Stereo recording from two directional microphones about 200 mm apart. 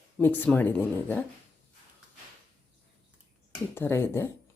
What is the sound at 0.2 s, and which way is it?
Speech, 10° left (ahead or behind).